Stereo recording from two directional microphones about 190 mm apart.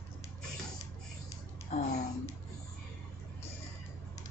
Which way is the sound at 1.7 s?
35° left (ahead or behind).